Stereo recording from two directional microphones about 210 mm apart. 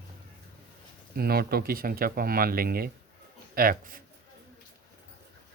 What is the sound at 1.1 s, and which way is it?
Speech, 45° right (ahead or behind).